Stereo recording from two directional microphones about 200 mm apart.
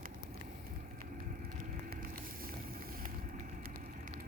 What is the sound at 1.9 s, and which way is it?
Vehicle, 50° right (ahead or behind).